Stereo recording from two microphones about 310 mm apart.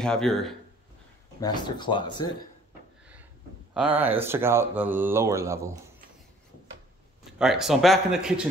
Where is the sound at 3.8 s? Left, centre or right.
Centre.